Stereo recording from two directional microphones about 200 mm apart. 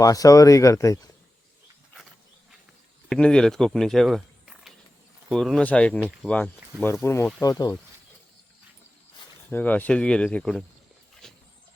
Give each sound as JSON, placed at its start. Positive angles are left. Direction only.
{"t": 0.0, "sound": "speech", "side_deg": 15}
{"t": 3.1, "sound": "speech", "side_deg": 5}
{"t": 9.5, "sound": "speech", "side_deg": 10}
{"t": 11.2, "sound": "a sound", "side_deg": 5}